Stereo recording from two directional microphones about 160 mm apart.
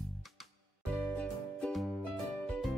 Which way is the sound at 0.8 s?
10° left (ahead or behind).